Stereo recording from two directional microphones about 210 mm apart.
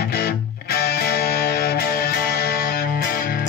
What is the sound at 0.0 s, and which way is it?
Music, 50° left (ahead or behind).